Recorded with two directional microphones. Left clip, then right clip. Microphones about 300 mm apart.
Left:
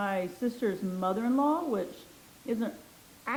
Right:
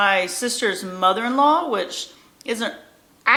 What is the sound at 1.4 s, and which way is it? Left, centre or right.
Speech, right.